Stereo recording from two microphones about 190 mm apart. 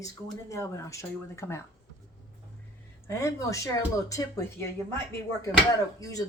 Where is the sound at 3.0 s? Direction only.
15° left (ahead or behind).